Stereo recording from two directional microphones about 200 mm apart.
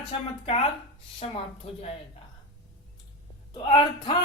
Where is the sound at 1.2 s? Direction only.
30° left (ahead or behind).